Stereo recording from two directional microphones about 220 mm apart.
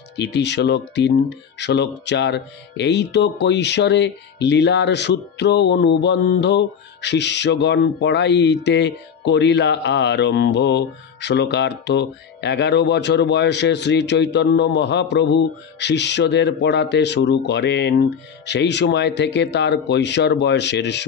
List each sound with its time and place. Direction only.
0.1 s speech: 50° left (ahead or behind)